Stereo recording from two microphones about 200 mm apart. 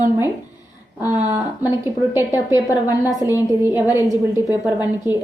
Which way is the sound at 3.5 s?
10° right (ahead or behind).